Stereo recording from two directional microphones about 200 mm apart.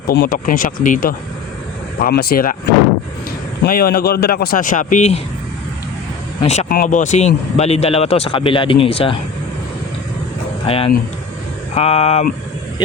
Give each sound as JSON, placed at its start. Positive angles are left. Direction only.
{"t": 0.1, "sound": "speech", "side_deg": 50}
{"t": 3.6, "sound": "speech", "side_deg": 50}
{"t": 6.4, "sound": "speech", "side_deg": 35}
{"t": 10.7, "sound": "speech", "side_deg": 30}